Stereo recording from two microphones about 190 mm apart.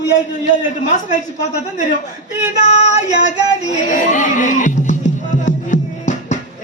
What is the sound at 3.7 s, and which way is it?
Music, 40° left (ahead or behind).